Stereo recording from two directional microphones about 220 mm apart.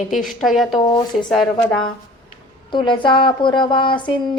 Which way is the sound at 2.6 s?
20° left (ahead or behind).